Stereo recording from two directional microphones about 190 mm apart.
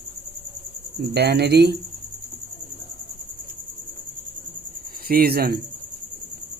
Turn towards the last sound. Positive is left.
turn(degrees=-55)  # may be behind; listen again after turning